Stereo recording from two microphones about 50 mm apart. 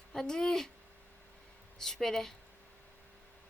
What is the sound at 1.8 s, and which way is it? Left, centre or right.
Speech, centre.